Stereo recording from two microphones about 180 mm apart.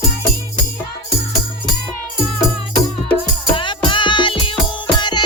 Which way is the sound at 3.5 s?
25° left (ahead or behind).